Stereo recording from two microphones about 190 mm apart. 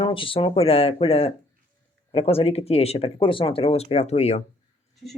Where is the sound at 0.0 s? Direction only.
30° left (ahead or behind).